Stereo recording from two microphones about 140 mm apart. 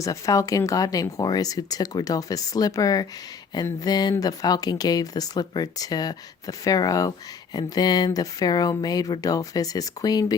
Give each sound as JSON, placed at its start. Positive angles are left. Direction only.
{"t": 0.0, "sound": "speech", "side_deg": 25}